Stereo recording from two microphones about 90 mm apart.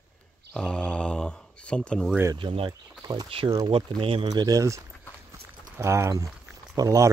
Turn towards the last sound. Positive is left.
turn(degrees=-40)  # may be behind; listen again after turning